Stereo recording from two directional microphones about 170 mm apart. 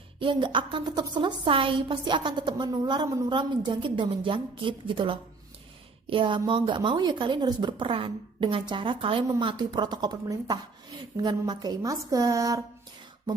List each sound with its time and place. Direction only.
0.2 s a woman's voice: 30° right (ahead or behind)